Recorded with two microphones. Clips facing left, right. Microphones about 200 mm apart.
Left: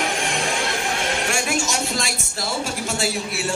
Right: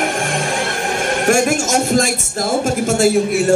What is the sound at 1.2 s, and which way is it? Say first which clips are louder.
Speech: right 9 dB; 50° right (ahead or behind).